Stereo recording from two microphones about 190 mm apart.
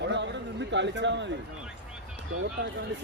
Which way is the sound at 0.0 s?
65° right (ahead or behind).